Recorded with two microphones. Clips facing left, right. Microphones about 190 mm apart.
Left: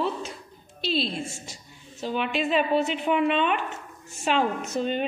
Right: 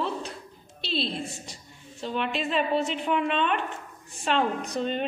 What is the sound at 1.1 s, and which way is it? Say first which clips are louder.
Speech: left 1 dB; 35° right (ahead or behind).